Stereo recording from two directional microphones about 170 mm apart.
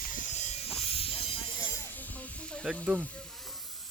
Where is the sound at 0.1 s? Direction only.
45° left (ahead or behind); by 2.6 s 5° left (ahead or behind).